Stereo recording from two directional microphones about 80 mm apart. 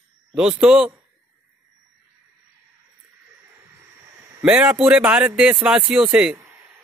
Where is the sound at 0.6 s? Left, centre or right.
Centre.